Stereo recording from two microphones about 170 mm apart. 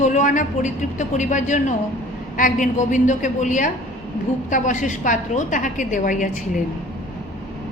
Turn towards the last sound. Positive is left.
turn(degrees=50)  # may be behind; listen again after turning